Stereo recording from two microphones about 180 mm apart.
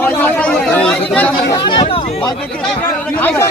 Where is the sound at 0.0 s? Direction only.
10° left (ahead or behind).